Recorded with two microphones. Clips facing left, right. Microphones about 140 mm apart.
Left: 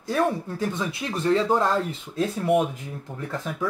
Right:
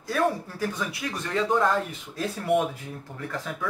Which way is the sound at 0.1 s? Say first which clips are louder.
Left 2 dB; 25° left (ahead or behind).